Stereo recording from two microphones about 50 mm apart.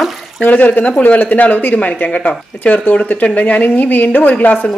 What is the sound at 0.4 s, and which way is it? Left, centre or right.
A woman's voice, left.